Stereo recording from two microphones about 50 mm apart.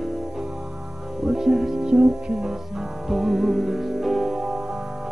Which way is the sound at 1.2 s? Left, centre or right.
Centre.